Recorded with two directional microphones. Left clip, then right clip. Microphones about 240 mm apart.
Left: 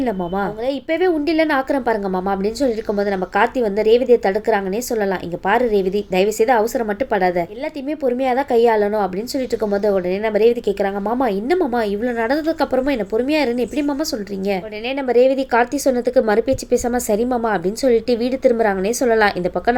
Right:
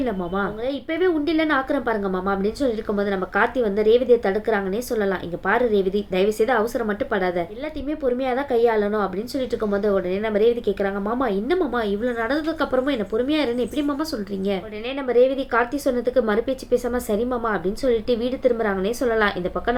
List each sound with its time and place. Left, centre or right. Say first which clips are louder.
0.9 s a woman's voice: left 3 dB; left
15.0 s a woman's voice: left 3 dB; left